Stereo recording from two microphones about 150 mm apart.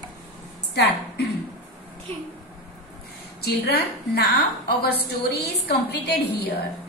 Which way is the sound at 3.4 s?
90° left.